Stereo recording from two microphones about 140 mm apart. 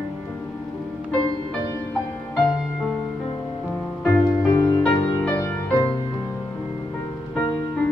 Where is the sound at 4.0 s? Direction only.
20° left (ahead or behind).